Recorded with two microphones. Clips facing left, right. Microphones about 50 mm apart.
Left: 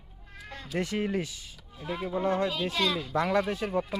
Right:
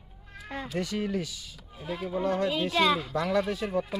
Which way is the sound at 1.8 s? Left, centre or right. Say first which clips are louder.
Even; centre.